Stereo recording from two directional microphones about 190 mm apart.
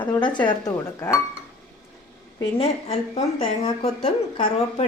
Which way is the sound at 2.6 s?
30° left (ahead or behind).